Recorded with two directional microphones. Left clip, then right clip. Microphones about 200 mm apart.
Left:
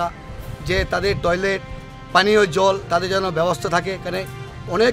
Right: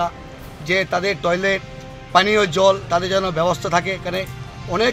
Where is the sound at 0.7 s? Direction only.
25° left (ahead or behind).